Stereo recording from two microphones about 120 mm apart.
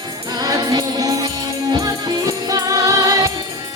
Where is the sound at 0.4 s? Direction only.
30° right (ahead or behind).